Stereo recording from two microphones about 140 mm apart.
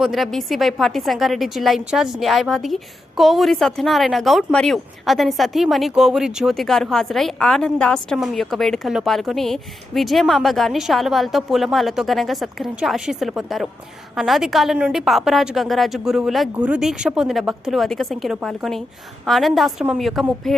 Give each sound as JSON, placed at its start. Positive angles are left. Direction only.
{"t": 0.0, "sound": "a woman's voice", "side_deg": 0}